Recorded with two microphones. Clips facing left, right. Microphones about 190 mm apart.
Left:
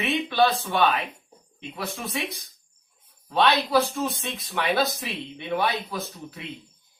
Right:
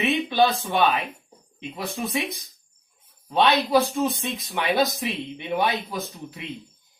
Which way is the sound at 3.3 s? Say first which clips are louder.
Right 2 dB; 20° right (ahead or behind).